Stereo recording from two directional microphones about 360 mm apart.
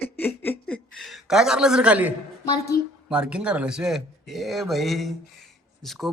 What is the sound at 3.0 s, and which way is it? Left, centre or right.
Speech, centre.